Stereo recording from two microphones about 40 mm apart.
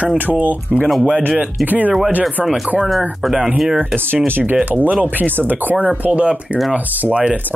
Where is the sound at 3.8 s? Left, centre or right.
Right.